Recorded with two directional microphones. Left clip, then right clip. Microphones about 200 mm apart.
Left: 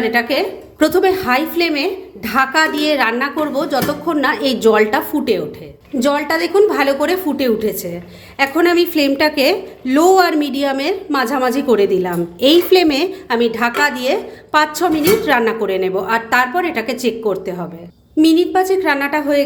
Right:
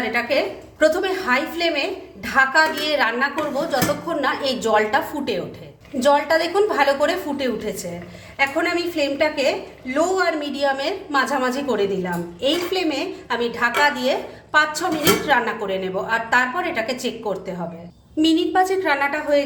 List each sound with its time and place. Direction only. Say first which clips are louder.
0.1 s a woman's voice: left 4 dB; 40° left (ahead or behind)